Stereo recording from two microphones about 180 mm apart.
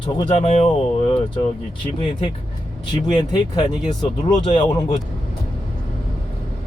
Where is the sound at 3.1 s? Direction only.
20° left (ahead or behind).